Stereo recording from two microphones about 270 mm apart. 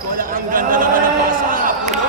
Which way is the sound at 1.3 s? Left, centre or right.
Right.